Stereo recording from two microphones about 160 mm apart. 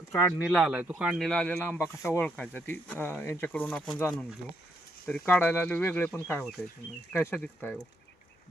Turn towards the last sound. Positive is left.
turn(degrees=5)  # may be behind; listen again after turning